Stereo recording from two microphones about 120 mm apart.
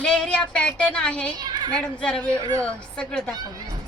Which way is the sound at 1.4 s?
35° right (ahead or behind).